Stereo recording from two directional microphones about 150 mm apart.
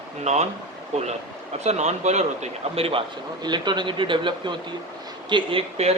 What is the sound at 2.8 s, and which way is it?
Speech, 40° right (ahead or behind).